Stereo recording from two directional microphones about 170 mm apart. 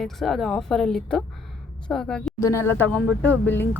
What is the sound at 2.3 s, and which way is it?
Speech, 15° left (ahead or behind).